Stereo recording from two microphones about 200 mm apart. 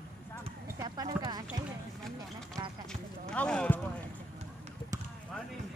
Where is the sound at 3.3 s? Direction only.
5° left (ahead or behind).